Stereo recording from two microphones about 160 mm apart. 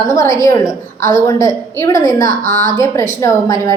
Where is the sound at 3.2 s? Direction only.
20° left (ahead or behind).